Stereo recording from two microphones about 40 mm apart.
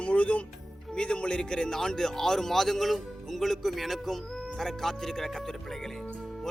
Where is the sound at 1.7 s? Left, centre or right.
Centre.